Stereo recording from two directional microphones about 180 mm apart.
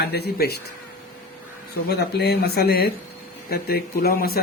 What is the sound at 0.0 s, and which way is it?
Speech, 60° left (ahead or behind).